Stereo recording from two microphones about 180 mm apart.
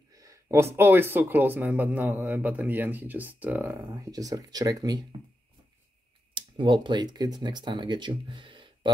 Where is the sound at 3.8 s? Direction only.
20° right (ahead or behind).